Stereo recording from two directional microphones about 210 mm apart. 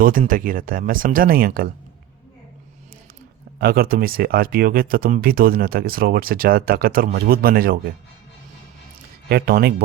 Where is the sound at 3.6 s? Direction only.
45° right (ahead or behind).